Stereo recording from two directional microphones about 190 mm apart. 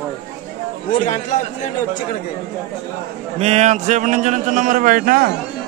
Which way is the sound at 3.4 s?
35° right (ahead or behind).